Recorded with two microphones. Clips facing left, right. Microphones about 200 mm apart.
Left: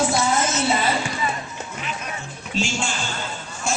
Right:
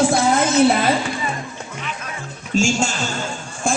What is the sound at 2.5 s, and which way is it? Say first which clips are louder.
Speech: right 7 dB; 45° right (ahead or behind).